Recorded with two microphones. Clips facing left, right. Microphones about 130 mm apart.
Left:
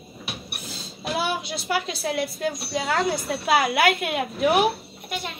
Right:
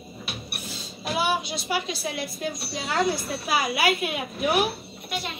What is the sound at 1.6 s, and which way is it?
A woman's voice, 75° left (ahead or behind).